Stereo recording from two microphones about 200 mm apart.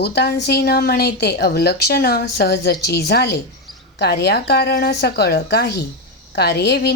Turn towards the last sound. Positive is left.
turn(degrees=55)  # may be behind; listen again after turning